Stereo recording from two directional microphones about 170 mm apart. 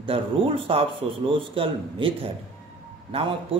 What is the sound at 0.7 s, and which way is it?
A man's voice, 35° right (ahead or behind).